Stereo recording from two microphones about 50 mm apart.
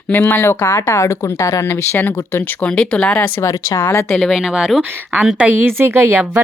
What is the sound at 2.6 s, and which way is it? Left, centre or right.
Speech, left.